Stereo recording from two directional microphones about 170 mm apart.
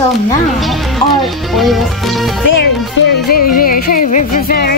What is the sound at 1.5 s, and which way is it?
Speech, centre (ahead or behind).